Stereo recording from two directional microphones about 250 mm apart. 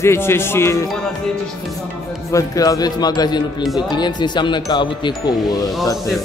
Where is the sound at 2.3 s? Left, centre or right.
Centre.